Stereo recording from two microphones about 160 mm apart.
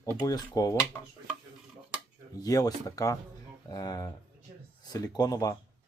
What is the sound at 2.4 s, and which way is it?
Speech, 20° left (ahead or behind).